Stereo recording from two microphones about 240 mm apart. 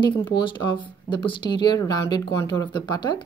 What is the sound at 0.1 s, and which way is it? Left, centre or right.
Speech, centre.